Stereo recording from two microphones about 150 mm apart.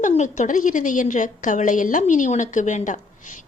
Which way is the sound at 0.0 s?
55° left (ahead or behind).